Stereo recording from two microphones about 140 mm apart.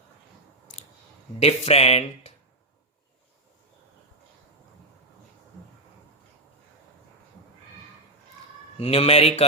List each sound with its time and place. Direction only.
1.4 s speech: 50° left (ahead or behind)
8.8 s speech: 45° left (ahead or behind)